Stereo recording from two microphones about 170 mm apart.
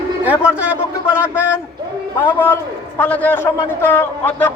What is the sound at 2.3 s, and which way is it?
A man's voice, 10° left (ahead or behind).